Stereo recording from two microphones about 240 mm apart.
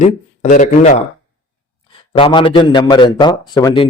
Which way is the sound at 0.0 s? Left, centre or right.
Left.